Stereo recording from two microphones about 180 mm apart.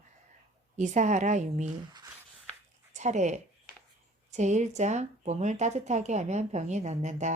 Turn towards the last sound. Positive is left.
turn(degrees=-40)  # may be behind; listen again after turning